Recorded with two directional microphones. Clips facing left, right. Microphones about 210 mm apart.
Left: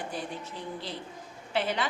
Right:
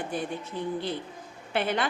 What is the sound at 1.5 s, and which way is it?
Speech, 55° right (ahead or behind).